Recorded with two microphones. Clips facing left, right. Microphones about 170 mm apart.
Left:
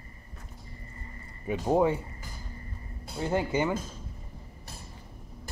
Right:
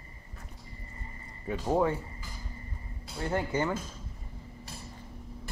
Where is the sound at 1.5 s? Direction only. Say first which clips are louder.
Left 3 dB; 15° left (ahead or behind).